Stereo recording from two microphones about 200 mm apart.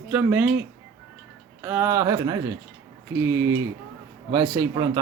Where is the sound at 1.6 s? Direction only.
10° right (ahead or behind).